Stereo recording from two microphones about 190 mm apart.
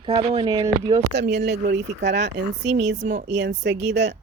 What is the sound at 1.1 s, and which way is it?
Speech, 60° right (ahead or behind).